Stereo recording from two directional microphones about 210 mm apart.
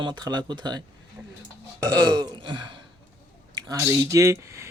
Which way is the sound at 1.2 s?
10° right (ahead or behind).